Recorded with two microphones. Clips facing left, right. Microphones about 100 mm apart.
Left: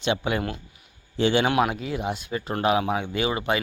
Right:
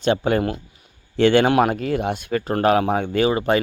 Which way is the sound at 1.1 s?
60° right (ahead or behind).